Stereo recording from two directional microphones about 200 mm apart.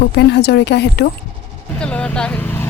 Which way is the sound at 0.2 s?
60° left (ahead or behind).